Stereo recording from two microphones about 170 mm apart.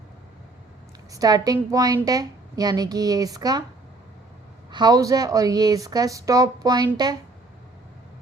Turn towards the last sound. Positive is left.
turn(degrees=-25)  # may be behind; listen again after turning